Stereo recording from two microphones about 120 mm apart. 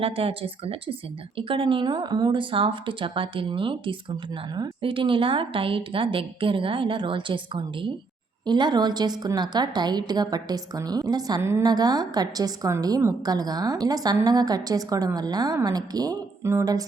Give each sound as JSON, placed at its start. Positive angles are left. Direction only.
{"t": 0.0, "sound": "a woman's voice", "side_deg": -50}